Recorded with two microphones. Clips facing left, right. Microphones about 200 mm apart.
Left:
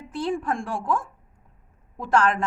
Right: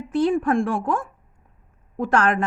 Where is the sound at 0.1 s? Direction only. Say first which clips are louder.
Right 7 dB; 55° right (ahead or behind).